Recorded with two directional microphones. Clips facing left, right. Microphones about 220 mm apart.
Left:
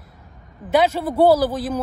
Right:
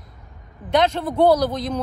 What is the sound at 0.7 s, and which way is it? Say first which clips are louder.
A man's voice: left 1 dB; 5° left (ahead or behind).